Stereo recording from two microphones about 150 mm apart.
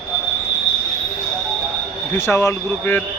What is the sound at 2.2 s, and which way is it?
Speech, 15° left (ahead or behind).